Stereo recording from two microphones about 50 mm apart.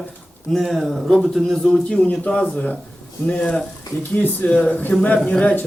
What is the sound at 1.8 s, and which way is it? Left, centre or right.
Speech, left.